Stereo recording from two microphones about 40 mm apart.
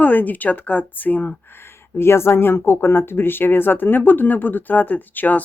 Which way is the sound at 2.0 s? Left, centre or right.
Left.